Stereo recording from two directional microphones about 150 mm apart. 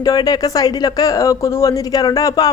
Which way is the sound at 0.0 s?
25° left (ahead or behind).